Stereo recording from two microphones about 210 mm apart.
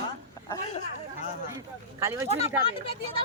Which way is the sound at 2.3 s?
30° left (ahead or behind).